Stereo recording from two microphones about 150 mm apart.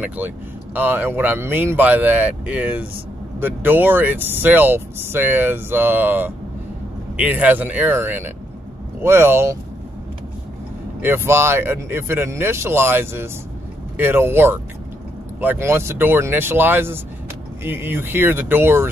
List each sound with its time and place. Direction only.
0.0 s speech: 10° right (ahead or behind)
11.0 s speech: 15° right (ahead or behind)